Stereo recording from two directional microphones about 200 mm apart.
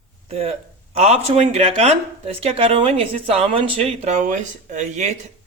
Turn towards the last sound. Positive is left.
turn(degrees=-35)  # may be behind; listen again after turning